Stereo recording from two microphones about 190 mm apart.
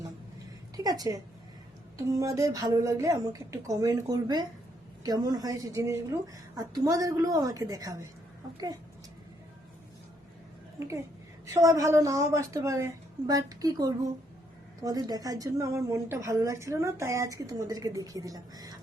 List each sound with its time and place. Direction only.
0.8 s speech: 20° right (ahead or behind)
10.8 s a woman's voice: 15° right (ahead or behind)